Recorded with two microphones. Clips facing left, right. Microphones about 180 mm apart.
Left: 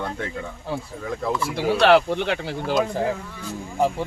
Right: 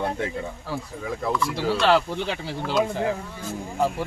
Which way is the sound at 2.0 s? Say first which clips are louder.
Left 4 dB; 65° left (ahead or behind).